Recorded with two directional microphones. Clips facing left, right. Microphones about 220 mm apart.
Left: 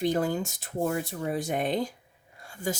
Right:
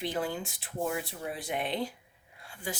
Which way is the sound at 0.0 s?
45° left (ahead or behind).